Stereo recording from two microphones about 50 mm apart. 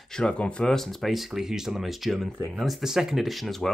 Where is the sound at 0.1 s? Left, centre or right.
Centre.